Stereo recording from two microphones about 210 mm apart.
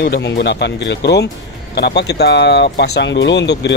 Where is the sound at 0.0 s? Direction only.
55° left (ahead or behind).